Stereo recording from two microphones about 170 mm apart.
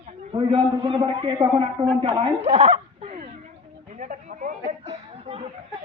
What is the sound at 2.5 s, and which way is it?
Speech, 40° right (ahead or behind).